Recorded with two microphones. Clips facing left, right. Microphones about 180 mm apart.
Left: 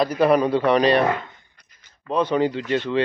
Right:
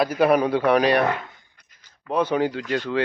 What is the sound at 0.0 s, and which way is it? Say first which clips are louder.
Speech: left 1 dB; 5° right (ahead or behind).